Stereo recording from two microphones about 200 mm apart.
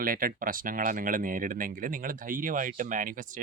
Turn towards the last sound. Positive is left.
turn(degrees=-40)  # may be behind; listen again after turning